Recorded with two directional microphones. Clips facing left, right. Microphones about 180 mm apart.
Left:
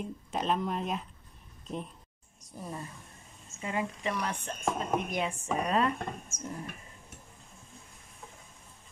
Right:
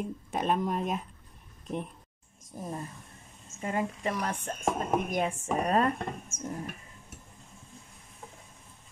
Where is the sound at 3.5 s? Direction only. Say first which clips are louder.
Right 2 dB; 45° right (ahead or behind).